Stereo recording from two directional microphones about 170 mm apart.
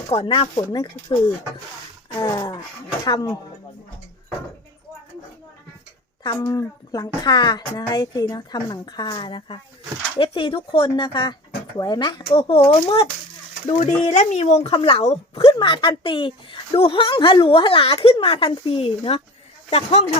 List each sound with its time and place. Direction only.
0.3 s speech: 25° left (ahead or behind)
6.2 s speech: 25° left (ahead or behind)
13.7 s speech: 40° left (ahead or behind)